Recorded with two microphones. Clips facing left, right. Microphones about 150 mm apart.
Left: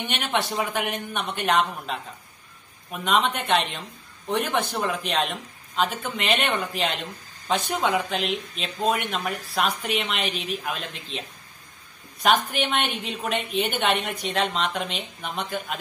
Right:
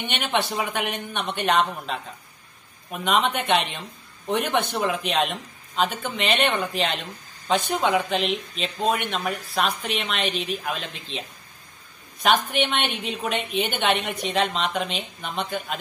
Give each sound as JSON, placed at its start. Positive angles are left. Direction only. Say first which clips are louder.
{"t": 0.1, "sound": "speech", "louder": "right 2 dB", "side_deg": 0}
{"t": 12.2, "sound": "speech", "louder": "right 1 dB", "side_deg": 0}